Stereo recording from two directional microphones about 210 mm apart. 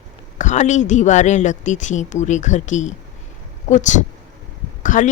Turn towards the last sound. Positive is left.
turn(degrees=35)  # may be behind; listen again after turning